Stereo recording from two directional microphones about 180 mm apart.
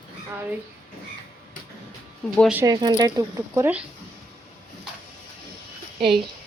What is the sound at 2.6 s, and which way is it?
Speech, 20° right (ahead or behind).